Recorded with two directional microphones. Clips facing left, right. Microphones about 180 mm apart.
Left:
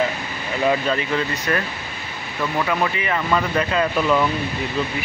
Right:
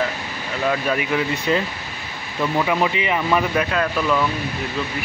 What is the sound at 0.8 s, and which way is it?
Speech, 10° right (ahead or behind).